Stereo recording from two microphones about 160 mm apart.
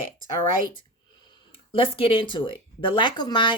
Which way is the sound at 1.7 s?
35° left (ahead or behind).